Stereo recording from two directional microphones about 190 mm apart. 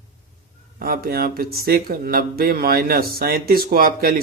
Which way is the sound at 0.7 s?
50° right (ahead or behind).